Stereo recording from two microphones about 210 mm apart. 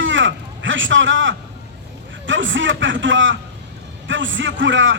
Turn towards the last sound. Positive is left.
turn(degrees=-60)  # may be behind; listen again after turning